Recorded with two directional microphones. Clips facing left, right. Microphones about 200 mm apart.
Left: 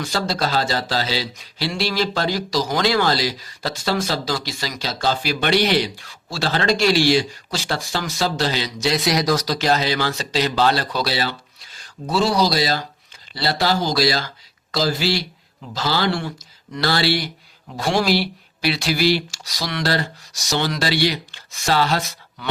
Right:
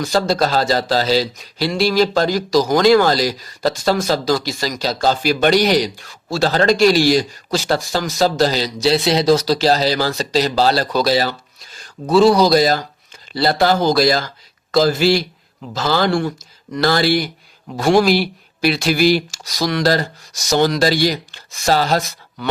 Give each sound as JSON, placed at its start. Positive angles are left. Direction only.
{"t": 0.0, "sound": "speech", "side_deg": -45}